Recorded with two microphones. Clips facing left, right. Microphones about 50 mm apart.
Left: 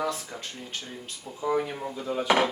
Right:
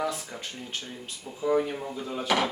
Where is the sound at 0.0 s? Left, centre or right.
Centre.